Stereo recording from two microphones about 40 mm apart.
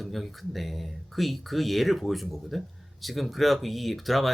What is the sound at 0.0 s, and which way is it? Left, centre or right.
Speech, centre.